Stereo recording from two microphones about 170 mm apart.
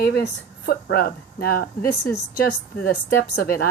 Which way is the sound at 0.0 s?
75° left (ahead or behind).